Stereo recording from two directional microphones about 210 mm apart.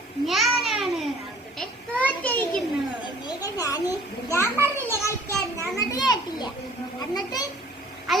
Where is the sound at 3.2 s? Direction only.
15° left (ahead or behind).